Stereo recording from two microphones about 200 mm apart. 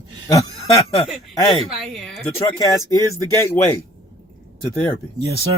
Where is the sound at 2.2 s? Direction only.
15° left (ahead or behind).